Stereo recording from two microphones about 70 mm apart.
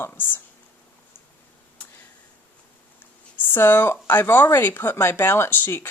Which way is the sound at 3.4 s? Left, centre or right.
Left.